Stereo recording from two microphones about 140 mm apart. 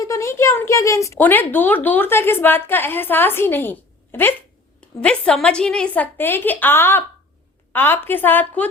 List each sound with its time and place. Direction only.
0.0 s a woman's voice: 20° left (ahead or behind)